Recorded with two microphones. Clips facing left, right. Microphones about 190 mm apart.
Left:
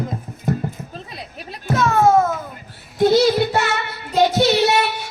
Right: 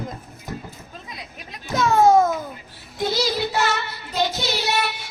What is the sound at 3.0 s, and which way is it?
Child singing, 55° left (ahead or behind).